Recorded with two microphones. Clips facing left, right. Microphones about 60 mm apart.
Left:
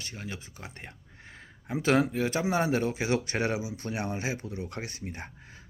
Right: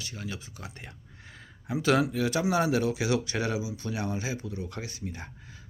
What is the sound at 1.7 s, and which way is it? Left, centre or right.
Speech, left.